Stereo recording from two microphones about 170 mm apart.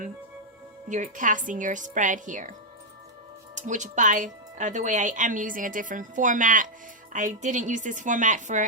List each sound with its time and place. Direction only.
0.9 s speech: 45° right (ahead or behind)